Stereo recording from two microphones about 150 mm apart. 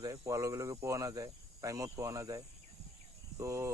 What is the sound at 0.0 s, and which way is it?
Speech, 20° right (ahead or behind).